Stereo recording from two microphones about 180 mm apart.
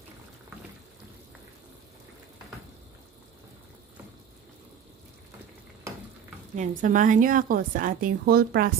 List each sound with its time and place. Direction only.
6.5 s a woman's voice: 45° right (ahead or behind)